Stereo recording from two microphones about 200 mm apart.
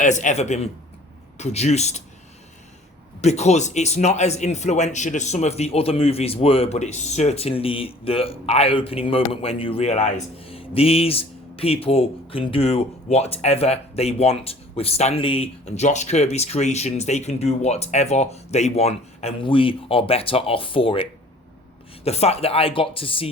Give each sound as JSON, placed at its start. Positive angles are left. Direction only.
{"t": 0.0, "sound": "a man's voice", "side_deg": 40}
{"t": 3.2, "sound": "a man's voice", "side_deg": 35}